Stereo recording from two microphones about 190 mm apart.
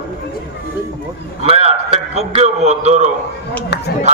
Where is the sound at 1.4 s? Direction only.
35° right (ahead or behind).